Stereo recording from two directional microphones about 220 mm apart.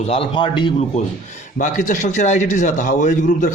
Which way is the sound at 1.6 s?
35° left (ahead or behind).